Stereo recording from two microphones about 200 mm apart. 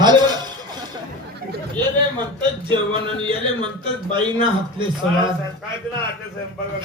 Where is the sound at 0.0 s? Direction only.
20° right (ahead or behind).